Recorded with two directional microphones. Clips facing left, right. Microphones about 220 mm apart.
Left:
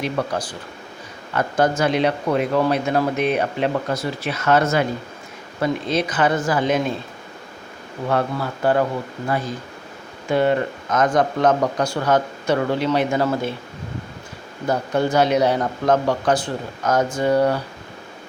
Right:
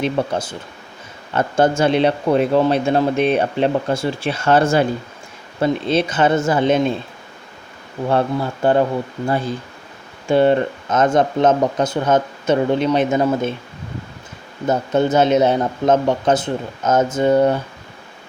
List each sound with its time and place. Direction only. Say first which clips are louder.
0.0 s a man's voice: right 4 dB; 25° right (ahead or behind)
8.1 s a man's voice: right 3 dB; 25° right (ahead or behind)
14.7 s a man's voice: right 3 dB; 20° right (ahead or behind)